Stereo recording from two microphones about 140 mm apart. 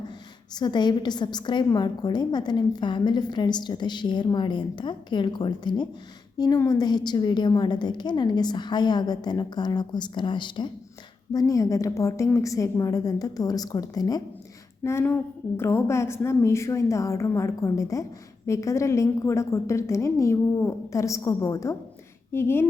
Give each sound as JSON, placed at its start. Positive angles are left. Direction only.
{"t": 0.5, "sound": "a woman's voice", "side_deg": 30}
{"t": 14.8, "sound": "a woman's voice", "side_deg": 15}